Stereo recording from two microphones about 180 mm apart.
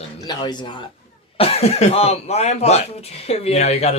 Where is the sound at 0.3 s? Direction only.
25° left (ahead or behind).